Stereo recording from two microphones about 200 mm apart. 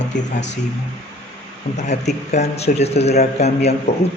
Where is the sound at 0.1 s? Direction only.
40° left (ahead or behind).